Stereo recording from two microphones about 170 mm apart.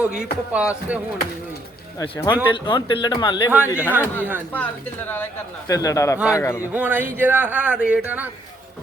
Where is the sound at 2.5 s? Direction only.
30° left (ahead or behind).